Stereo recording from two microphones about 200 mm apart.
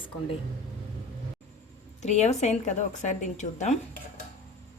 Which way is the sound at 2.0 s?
35° left (ahead or behind).